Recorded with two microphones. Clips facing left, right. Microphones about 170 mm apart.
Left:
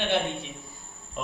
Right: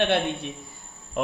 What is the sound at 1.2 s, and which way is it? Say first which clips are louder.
Speech: right 7 dB; 70° right (ahead or behind).